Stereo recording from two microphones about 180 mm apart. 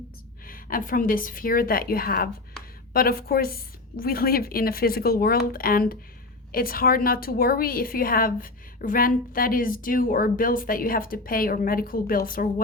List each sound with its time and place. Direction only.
0.4 s a woman's voice: 50° left (ahead or behind)